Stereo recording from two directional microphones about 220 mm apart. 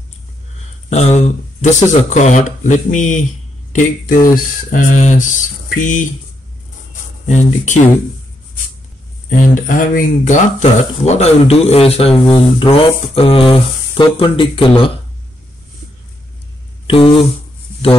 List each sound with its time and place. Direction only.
0.8 s speech: 30° left (ahead or behind)
7.2 s speech: 35° left (ahead or behind)
9.4 s speech: 35° left (ahead or behind)
16.8 s speech: 25° left (ahead or behind)